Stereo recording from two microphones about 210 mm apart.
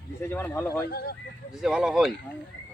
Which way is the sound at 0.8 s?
50° left (ahead or behind).